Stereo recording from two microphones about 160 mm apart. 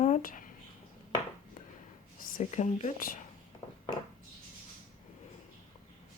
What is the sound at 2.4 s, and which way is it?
Speech, 45° left (ahead or behind).